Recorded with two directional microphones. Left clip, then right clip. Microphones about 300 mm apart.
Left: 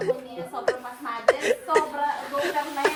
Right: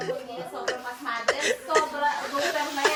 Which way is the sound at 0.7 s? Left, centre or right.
Centre.